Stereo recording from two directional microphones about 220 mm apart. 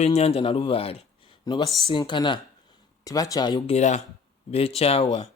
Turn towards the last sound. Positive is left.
turn(degrees=25)  # may be behind; listen again after turning